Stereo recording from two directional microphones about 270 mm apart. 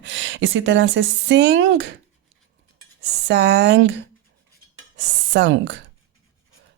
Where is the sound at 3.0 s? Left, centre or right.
Right.